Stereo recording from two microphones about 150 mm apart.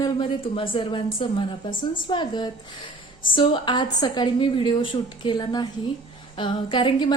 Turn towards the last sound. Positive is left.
turn(degrees=35)  # may be behind; listen again after turning